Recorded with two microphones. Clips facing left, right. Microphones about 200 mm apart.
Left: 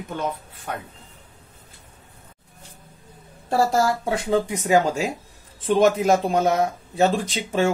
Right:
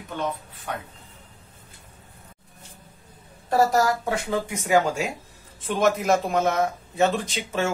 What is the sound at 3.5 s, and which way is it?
Speech, 30° left (ahead or behind).